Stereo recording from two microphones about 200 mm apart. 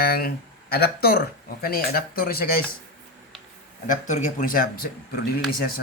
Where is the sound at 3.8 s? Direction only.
40° left (ahead or behind).